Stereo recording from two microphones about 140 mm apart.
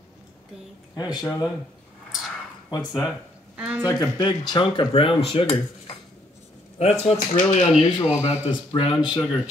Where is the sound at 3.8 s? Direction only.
25° left (ahead or behind); by 5.5 s 45° left (ahead or behind).